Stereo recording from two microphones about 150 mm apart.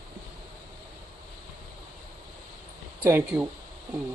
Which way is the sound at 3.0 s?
15° right (ahead or behind).